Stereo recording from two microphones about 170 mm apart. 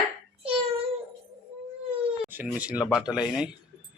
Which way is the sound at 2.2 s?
10° right (ahead or behind).